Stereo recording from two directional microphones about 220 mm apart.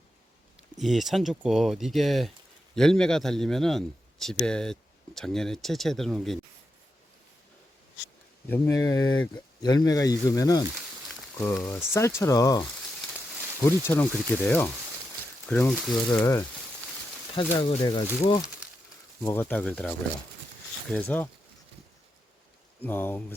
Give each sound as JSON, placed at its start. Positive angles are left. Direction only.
{"t": 0.8, "sound": "a man's voice", "side_deg": 0}
{"t": 8.4, "sound": "speech", "side_deg": 10}
{"t": 13.7, "sound": "speech", "side_deg": 10}
{"t": 17.3, "sound": "speech", "side_deg": 25}
{"t": 19.2, "sound": "speech", "side_deg": 10}
{"t": 20.9, "sound": "speech", "side_deg": 10}
{"t": 22.8, "sound": "speech", "side_deg": 10}